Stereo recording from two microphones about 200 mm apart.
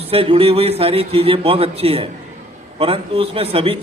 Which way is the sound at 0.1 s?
30° right (ahead or behind).